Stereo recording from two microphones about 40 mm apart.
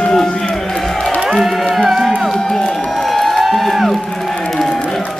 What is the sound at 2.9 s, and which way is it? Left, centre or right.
Crowd, centre.